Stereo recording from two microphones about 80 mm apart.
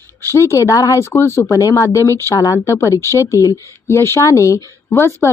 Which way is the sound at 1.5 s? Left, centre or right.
Left.